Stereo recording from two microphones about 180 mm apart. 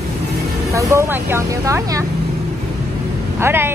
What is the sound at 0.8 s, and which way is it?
Speech, 15° right (ahead or behind).